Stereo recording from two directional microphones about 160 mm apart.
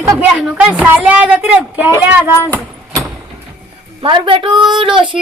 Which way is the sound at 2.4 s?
10° left (ahead or behind).